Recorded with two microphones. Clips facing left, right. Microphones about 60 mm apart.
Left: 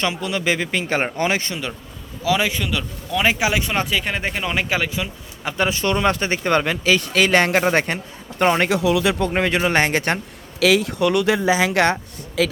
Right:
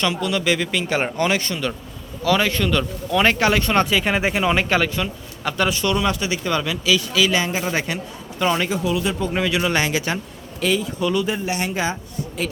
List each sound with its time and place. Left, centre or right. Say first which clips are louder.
0.0 s speech: right 1 dB; left
2.2 s speech: right 1 dB; centre
5.5 s speech: even; left
7.6 s speech: left 4 dB; left
8.7 s speech: left 4 dB; left
9.3 s speech: left 2 dB; left
10.6 s speech: left 4 dB; left